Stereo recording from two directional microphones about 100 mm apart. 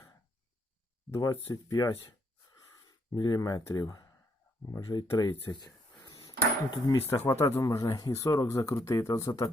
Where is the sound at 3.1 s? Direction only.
45° left (ahead or behind).